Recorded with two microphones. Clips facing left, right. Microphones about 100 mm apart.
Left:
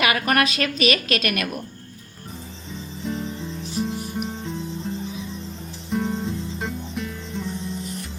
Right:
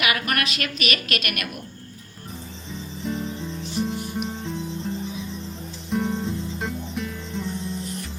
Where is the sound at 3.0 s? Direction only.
Centre (ahead or behind).